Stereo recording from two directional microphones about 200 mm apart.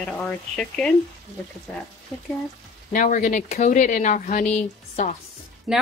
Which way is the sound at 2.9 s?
40° left (ahead or behind).